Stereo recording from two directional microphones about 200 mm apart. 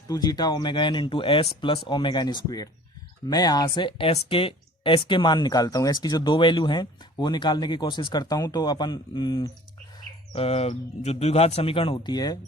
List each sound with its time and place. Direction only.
0.1 s speech: 20° left (ahead or behind)